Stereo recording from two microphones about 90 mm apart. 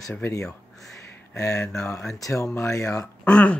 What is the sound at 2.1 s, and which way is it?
Speech, 40° left (ahead or behind).